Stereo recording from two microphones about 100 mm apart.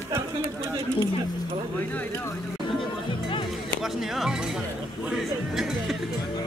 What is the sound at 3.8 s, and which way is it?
Speech, 5° right (ahead or behind).